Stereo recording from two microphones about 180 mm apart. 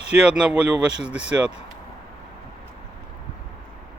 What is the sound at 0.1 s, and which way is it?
Speech, 5° right (ahead or behind).